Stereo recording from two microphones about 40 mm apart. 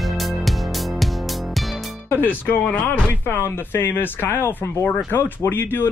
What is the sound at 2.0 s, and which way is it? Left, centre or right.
Speech, left.